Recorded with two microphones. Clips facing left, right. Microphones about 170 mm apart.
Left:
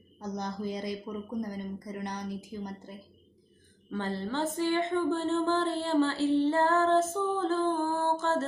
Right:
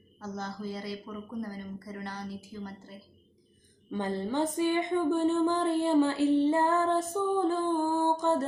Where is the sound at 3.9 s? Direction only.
15° right (ahead or behind).